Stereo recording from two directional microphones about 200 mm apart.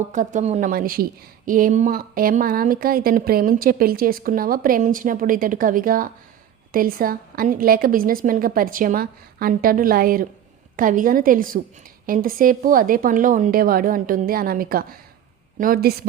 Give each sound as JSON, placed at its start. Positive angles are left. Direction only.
{"t": 0.1, "sound": "a woman's voice", "side_deg": -40}